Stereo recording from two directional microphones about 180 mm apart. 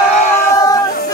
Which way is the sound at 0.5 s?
20° left (ahead or behind).